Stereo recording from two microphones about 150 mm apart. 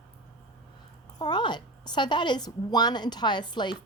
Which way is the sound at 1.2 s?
30° left (ahead or behind).